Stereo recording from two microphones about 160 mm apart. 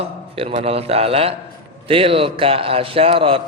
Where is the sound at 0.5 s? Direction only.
40° right (ahead or behind).